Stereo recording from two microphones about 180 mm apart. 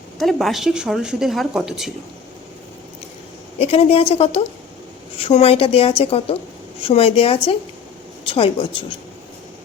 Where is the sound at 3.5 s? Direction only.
35° left (ahead or behind).